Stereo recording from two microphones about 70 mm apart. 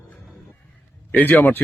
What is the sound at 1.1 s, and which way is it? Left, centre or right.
Speech, left.